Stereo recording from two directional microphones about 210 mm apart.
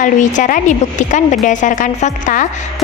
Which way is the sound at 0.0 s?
35° left (ahead or behind).